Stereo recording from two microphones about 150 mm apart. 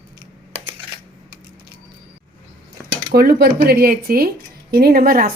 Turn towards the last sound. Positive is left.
turn(degrees=-75)  # may be behind; listen again after turning